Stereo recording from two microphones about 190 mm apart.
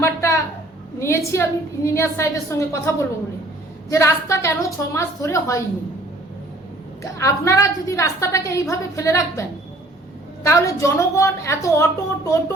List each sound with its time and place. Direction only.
0.0 s a sound: 15° left (ahead or behind)
0.9 s a woman's voice: 15° left (ahead or behind)
7.2 s a woman's voice: 15° left (ahead or behind)